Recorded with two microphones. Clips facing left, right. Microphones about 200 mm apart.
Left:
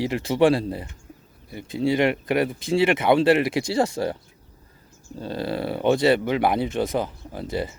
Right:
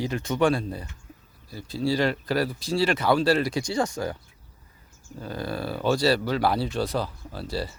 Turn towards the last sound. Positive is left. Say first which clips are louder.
# left 3 dB
turn(degrees=20)  # may be behind; listen again after turning